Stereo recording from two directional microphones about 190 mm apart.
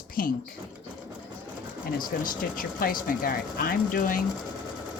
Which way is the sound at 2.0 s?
45° left (ahead or behind).